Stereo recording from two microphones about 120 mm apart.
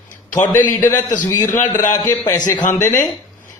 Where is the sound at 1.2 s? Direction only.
30° left (ahead or behind).